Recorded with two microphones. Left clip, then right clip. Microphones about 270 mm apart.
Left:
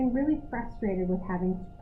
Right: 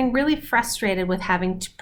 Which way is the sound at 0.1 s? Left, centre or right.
Centre.